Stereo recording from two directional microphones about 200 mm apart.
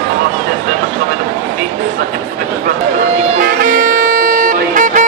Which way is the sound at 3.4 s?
45° right (ahead or behind).